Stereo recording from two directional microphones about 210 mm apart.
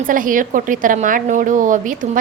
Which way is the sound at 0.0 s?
40° right (ahead or behind).